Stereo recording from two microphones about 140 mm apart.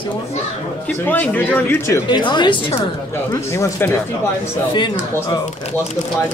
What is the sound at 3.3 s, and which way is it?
Speech, 20° left (ahead or behind).